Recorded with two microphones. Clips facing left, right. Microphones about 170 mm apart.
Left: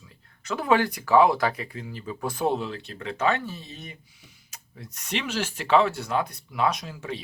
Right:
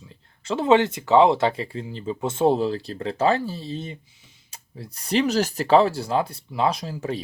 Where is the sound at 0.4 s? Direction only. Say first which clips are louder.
Right 5 dB; 25° right (ahead or behind).